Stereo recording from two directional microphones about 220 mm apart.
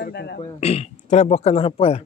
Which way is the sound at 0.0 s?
50° left (ahead or behind).